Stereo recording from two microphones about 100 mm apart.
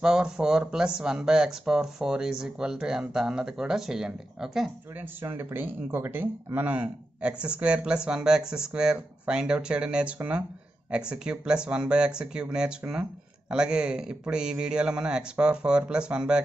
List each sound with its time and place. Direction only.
0.0 s speech: 5° right (ahead or behind)
4.9 s speech: 20° right (ahead or behind)